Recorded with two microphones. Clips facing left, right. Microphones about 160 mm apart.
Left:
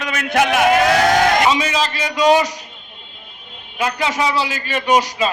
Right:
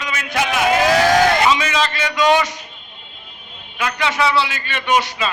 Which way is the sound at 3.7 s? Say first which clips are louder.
Left 1 dB; 35° left (ahead or behind).